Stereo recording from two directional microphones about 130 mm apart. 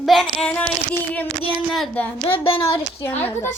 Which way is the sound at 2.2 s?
45° left (ahead or behind).